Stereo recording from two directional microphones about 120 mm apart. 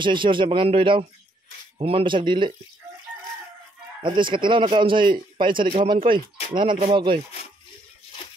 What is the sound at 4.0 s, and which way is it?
A man's voice, 45° right (ahead or behind).